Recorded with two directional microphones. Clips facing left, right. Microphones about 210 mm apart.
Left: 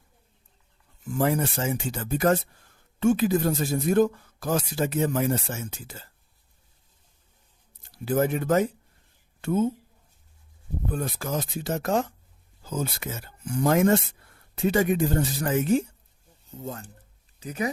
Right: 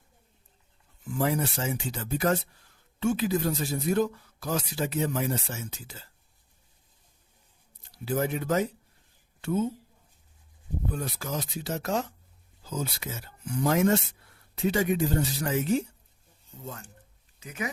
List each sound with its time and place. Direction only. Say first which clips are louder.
1.2 s speech: left 3 dB; 50° left (ahead or behind)
8.0 s speech: left 4 dB; 50° left (ahead or behind)
10.9 s speech: left 6 dB; 50° left (ahead or behind)
16.6 s speech: left 5 dB; 35° left (ahead or behind)